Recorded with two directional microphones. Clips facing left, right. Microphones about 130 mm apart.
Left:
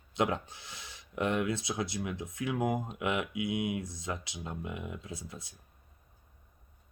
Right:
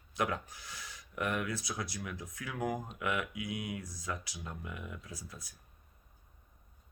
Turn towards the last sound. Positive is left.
turn(degrees=25)  # may be behind; listen again after turning